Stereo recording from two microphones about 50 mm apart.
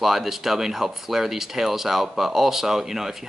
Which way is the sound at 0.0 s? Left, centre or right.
Centre.